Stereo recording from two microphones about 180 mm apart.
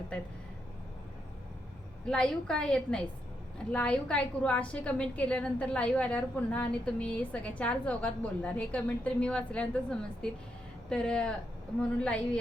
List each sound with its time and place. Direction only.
2.0 s a woman's voice: 5° left (ahead or behind)